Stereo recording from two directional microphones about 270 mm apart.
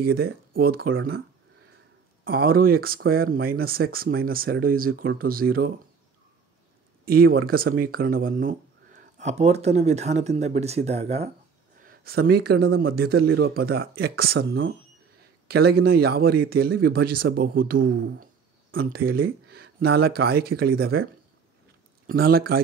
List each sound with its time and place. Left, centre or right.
0.0 s speech: right
2.2 s speech: right
7.1 s speech: right
11.8 s speech: right